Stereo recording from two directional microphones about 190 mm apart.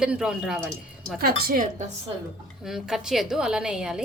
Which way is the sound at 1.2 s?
50° right (ahead or behind).